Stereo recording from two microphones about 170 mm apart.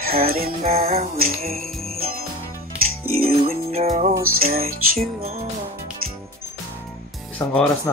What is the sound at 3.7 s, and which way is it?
Music, 40° right (ahead or behind).